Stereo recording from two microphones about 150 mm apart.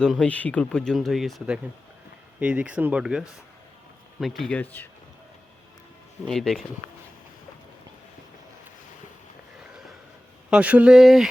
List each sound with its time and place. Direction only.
0.0 s speech: 5° left (ahead or behind)
6.2 s speech: 5° left (ahead or behind)
10.5 s speech: 10° right (ahead or behind)